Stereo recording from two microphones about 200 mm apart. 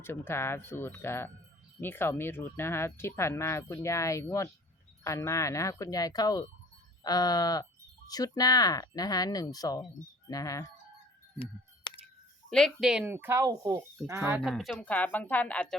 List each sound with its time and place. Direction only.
0.0 s speech: 10° left (ahead or behind)
11.3 s a sound: 25° left (ahead or behind)
12.5 s speech: centre (ahead or behind)
14.5 s speech: centre (ahead or behind)